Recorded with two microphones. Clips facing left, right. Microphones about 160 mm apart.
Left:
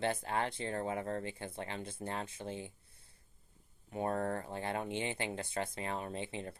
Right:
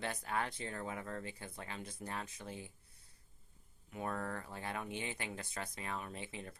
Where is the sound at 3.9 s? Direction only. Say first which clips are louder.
Left 6 dB; 35° left (ahead or behind).